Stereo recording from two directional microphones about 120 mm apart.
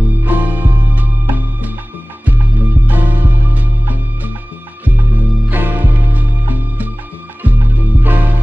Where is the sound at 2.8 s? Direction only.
15° right (ahead or behind).